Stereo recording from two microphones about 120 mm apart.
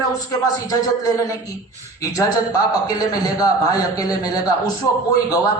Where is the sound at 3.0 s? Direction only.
30° left (ahead or behind).